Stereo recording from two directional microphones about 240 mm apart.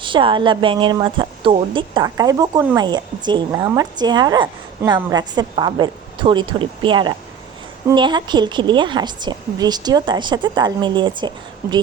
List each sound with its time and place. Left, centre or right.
0.0 s a woman's voice: right